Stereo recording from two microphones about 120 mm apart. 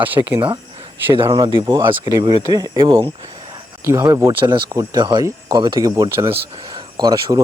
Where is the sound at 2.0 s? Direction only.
35° right (ahead or behind).